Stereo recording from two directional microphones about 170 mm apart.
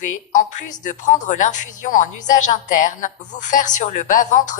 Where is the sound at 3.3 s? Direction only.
45° left (ahead or behind).